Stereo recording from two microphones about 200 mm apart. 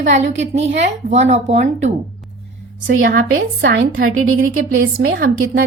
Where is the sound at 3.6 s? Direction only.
70° right (ahead or behind); by 4.7 s 90° right.